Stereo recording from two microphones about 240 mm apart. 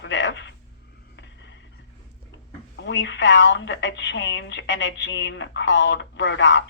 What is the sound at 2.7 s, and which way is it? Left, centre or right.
A woman's voice, left.